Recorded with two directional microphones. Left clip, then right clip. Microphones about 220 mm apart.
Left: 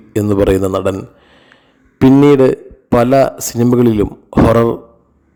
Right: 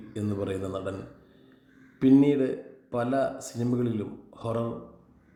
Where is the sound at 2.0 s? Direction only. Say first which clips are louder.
Left 14 dB; 50° left (ahead or behind).